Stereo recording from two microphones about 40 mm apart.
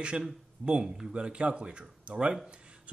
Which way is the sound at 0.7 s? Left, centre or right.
Right.